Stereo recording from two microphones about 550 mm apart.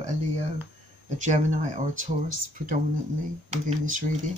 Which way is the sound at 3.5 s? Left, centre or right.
Centre.